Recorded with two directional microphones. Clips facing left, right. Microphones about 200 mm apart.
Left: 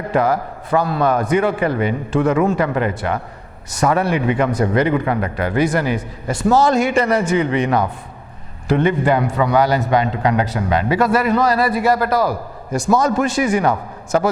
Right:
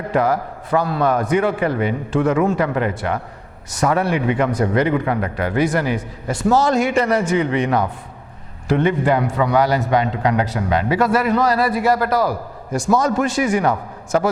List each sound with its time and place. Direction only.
0.0 s a man's voice: 15° left (ahead or behind)